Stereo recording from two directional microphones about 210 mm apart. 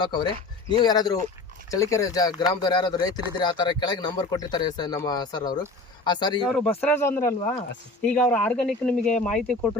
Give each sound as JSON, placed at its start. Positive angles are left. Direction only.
{"t": 0.0, "sound": "speech", "side_deg": 20}
{"t": 6.5, "sound": "speech", "side_deg": 5}